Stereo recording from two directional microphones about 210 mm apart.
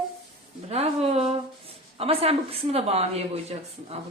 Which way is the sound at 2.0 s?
30° right (ahead or behind).